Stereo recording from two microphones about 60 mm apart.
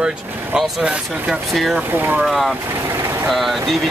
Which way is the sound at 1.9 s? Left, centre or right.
Right.